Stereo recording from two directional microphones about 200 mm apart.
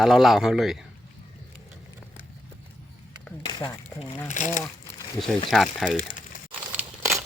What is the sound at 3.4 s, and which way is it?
Speech, 20° left (ahead or behind).